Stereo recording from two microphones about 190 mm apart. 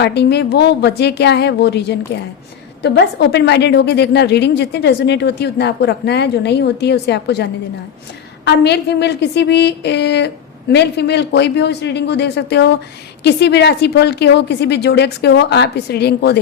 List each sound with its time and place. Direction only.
0.0 s a woman's voice: 60° left (ahead or behind)